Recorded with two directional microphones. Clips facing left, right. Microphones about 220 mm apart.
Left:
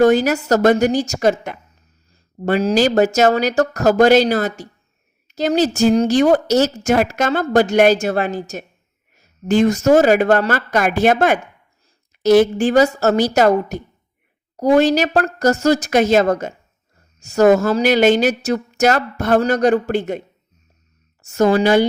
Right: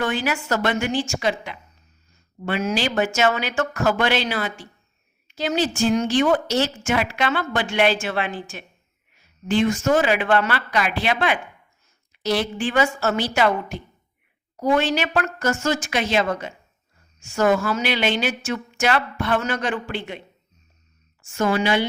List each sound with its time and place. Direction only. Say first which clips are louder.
0.0 s speech: left 11 dB; 40° left (ahead or behind)